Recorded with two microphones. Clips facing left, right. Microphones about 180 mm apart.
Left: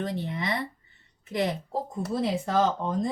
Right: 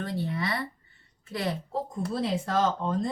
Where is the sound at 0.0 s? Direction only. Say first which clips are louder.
Even; 20° left (ahead or behind).